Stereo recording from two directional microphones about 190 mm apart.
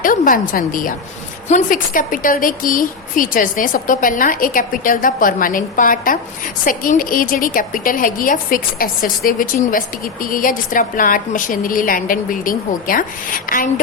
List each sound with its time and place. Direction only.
0.0 s a woman's voice: 45° left (ahead or behind)